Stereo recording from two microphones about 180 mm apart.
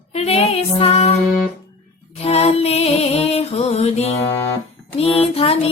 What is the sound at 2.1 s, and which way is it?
Music, 35° left (ahead or behind).